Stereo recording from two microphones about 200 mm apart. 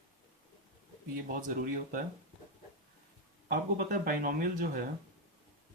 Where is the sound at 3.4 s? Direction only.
45° right (ahead or behind).